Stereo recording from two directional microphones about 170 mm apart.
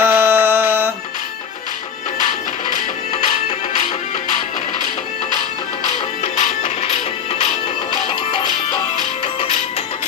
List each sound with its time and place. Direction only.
0.0 s music: 15° right (ahead or behind)
6.2 s music: 45° left (ahead or behind)